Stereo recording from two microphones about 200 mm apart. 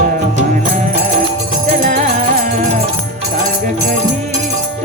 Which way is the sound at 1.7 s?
45° right (ahead or behind).